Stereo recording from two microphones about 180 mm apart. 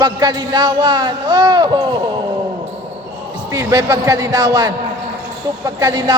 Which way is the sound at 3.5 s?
15° right (ahead or behind).